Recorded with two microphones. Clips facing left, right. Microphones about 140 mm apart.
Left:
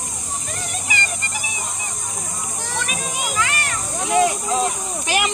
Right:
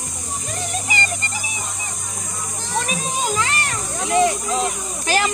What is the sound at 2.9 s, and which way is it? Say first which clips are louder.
Children playing: right 4 dB; 35° right (ahead or behind).